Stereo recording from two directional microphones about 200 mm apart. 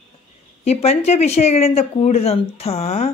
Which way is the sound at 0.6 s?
30° left (ahead or behind).